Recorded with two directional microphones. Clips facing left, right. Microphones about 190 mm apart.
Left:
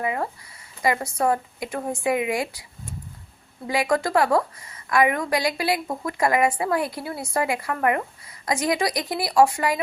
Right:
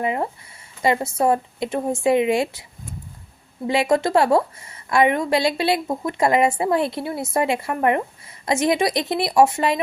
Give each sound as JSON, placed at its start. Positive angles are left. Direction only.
{"t": 0.0, "sound": "a woman's voice", "side_deg": -25}
{"t": 3.7, "sound": "a woman's voice", "side_deg": -25}